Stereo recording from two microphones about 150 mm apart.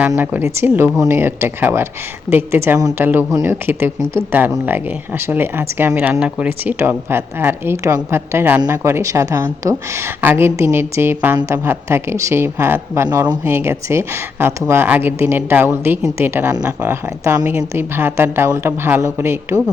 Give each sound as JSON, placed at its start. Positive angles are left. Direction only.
{"t": 0.2, "sound": "a woman's voice", "side_deg": -15}
{"t": 13.1, "sound": "a woman's voice", "side_deg": -30}
{"t": 13.4, "sound": "speech", "side_deg": -15}